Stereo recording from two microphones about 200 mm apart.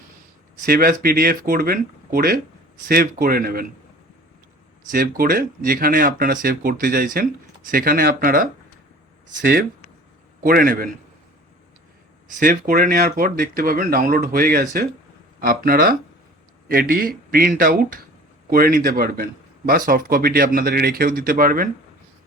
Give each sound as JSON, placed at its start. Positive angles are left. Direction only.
{"t": 0.6, "sound": "speech", "side_deg": -45}
{"t": 4.9, "sound": "speech", "side_deg": -45}
{"t": 12.4, "sound": "speech", "side_deg": -45}